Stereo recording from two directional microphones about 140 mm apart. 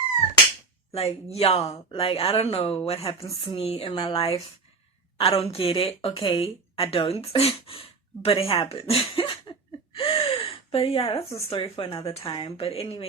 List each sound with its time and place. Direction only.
0.9 s speech: 45° left (ahead or behind)